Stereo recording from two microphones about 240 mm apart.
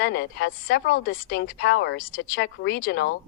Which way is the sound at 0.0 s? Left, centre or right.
Left.